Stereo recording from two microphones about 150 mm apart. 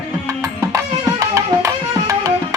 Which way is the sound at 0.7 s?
20° right (ahead or behind).